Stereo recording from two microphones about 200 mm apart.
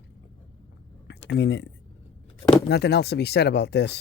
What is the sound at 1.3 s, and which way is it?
Speech, 60° left (ahead or behind).